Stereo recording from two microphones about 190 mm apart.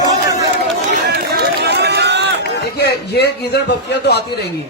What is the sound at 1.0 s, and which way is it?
Run, 55° right (ahead or behind).